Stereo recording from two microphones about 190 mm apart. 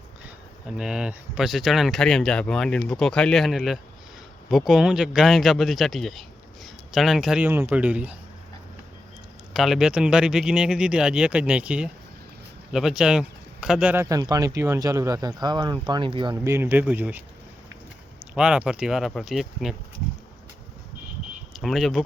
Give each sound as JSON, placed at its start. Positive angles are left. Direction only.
{"t": 0.8, "sound": "speech", "side_deg": -5}
{"t": 9.5, "sound": "speech", "side_deg": 0}
{"t": 18.3, "sound": "speech", "side_deg": -5}
{"t": 21.5, "sound": "speech", "side_deg": 0}